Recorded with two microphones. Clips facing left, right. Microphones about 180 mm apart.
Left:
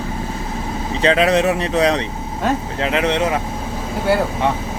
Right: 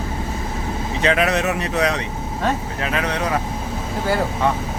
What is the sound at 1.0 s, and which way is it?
Speech, 30° left (ahead or behind).